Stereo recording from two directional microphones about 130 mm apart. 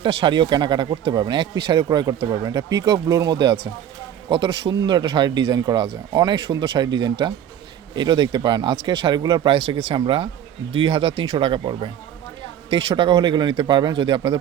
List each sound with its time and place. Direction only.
0.0 s speech: 40° right (ahead or behind)
9.6 s speech: 50° right (ahead or behind)